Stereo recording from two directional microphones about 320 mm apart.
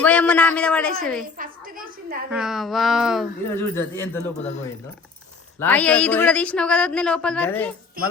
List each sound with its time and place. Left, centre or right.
0.0 s speech: centre
1.4 s a sound: right
2.3 s speech: centre
5.5 s speech: centre